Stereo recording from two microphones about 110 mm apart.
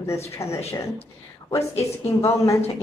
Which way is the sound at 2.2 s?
25° left (ahead or behind).